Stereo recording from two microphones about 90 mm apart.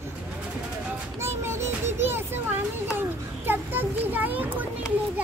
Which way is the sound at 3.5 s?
20° right (ahead or behind).